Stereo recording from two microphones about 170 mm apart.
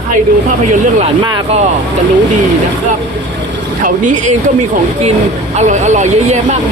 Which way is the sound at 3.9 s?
50° right (ahead or behind).